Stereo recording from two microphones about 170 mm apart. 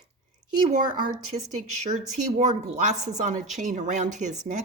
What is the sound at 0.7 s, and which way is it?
Speech, 50° right (ahead or behind).